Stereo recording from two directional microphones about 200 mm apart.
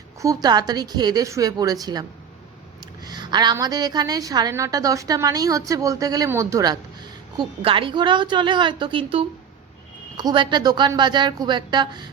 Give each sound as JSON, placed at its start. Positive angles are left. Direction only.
{"t": 0.2, "sound": "a woman's voice", "side_deg": -15}